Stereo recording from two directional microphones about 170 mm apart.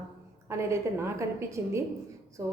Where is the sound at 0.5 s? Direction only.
15° right (ahead or behind).